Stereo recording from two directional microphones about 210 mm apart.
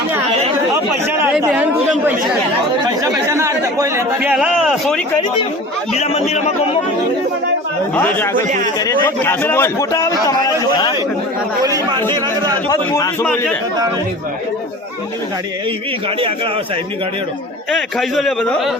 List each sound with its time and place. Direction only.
1.0 s a sound: 10° right (ahead or behind)
2.8 s speech: 15° right (ahead or behind)
6.0 s a man's voice: 30° left (ahead or behind)
7.9 s a man's voice: 10° left (ahead or behind)
8.4 s a man's voice: 35° right (ahead or behind)
8.8 s a man's voice: 10° left (ahead or behind)
12.7 s a man's voice: 15° left (ahead or behind)
17.7 s a man's voice: centre (ahead or behind)